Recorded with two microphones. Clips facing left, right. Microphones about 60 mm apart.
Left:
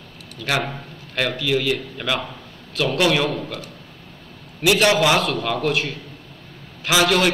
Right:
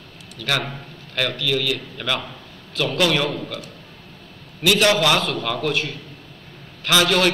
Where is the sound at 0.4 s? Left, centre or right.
Centre.